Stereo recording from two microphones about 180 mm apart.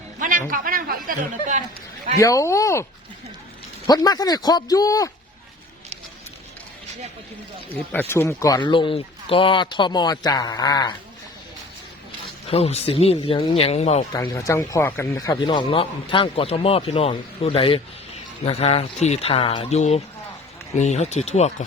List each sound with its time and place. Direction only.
0.2 s speech: 50° right (ahead or behind)
2.1 s speech: 20° left (ahead or behind)
3.8 s speech: 20° left (ahead or behind)
7.9 s speech: 10° left (ahead or behind)
12.5 s speech: 35° left (ahead or behind)
14.1 s speech: 20° left (ahead or behind); by 21.5 s 40° left (ahead or behind)